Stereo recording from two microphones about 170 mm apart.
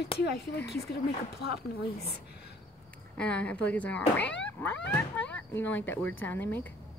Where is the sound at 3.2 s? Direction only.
5° left (ahead or behind).